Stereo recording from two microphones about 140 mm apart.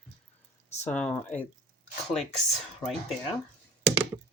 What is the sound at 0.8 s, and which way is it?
Speech, 10° left (ahead or behind).